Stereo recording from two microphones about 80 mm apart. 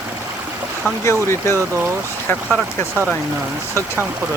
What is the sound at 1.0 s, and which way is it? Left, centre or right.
Speech, left.